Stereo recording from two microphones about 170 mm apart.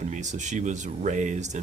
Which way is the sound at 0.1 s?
45° right (ahead or behind).